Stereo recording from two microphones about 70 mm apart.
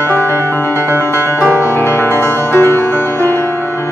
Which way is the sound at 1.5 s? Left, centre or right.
Right.